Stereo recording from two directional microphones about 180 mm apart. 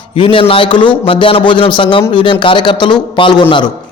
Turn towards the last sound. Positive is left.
turn(degrees=25)  # may be behind; listen again after turning